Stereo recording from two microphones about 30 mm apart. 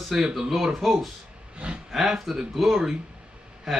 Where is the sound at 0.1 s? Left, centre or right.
Centre.